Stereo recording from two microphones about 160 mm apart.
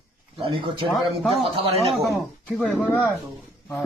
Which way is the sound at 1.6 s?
40° right (ahead or behind).